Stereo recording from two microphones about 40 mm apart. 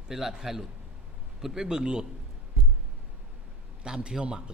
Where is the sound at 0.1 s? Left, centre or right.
Centre.